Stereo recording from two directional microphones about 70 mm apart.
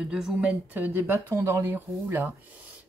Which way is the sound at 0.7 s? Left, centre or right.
Right.